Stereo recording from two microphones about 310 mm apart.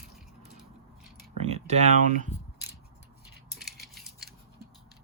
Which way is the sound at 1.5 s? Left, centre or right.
Right.